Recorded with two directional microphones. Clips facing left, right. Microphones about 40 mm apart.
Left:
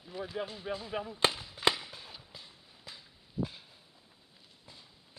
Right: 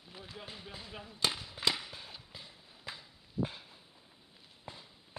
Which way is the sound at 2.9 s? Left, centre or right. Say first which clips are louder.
Right 5 dB; right.